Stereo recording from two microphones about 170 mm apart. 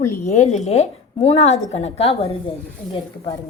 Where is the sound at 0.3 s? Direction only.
40° left (ahead or behind).